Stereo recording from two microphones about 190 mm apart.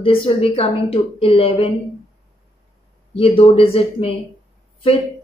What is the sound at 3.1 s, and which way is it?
Speech, 30° left (ahead or behind).